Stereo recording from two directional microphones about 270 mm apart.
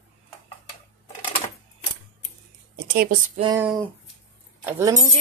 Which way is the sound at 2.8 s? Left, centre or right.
Right.